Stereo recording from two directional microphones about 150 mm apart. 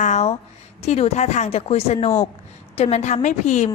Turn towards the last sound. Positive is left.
turn(degrees=50)  # may be behind; listen again after turning